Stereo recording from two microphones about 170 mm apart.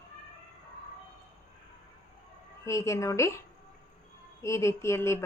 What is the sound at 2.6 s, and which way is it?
A woman's voice, 15° left (ahead or behind).